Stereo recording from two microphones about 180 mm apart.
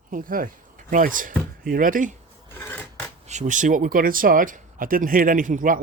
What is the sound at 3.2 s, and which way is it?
Speech, 40° right (ahead or behind).